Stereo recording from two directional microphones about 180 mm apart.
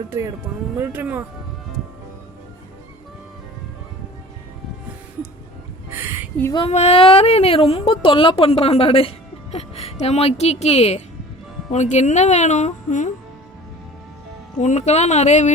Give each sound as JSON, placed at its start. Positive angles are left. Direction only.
{"t": 0.1, "sound": "speech", "side_deg": -15}
{"t": 5.9, "sound": "a sound", "side_deg": -15}
{"t": 6.5, "sound": "a woman's voice", "side_deg": 30}
{"t": 14.6, "sound": "a woman's voice", "side_deg": 40}